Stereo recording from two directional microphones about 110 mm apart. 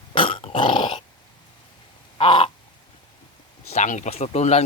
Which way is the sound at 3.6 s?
85° left.